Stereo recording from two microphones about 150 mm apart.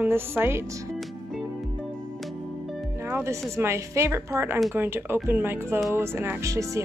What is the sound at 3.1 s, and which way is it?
Music, 15° right (ahead or behind).